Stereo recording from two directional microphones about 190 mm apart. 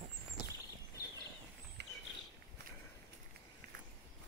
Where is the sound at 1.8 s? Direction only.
65° right (ahead or behind).